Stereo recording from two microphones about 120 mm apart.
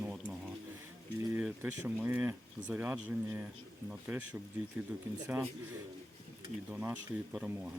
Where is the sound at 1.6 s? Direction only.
15° right (ahead or behind).